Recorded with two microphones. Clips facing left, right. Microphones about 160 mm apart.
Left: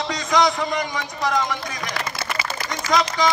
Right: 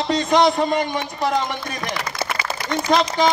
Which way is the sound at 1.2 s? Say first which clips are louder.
Even; 30° right (ahead or behind).